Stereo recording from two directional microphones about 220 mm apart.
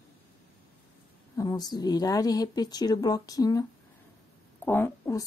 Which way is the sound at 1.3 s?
15° left (ahead or behind).